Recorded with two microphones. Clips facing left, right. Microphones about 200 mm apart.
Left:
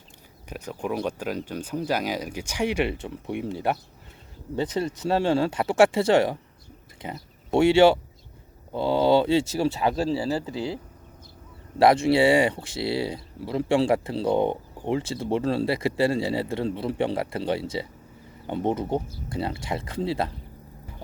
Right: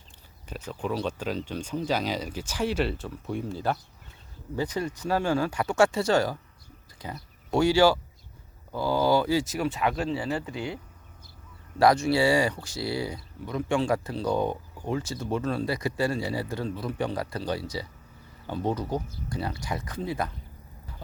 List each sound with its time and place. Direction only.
0.4 s speech: 10° left (ahead or behind); by 10.8 s 30° left (ahead or behind)
11.8 s speech: 25° left (ahead or behind)